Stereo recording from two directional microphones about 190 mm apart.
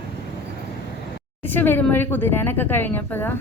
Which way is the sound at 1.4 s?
10° left (ahead or behind).